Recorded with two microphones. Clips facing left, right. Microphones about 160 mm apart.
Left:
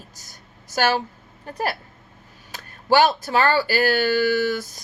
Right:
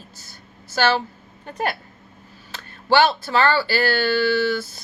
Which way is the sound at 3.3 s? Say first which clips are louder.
Even; 15° left (ahead or behind).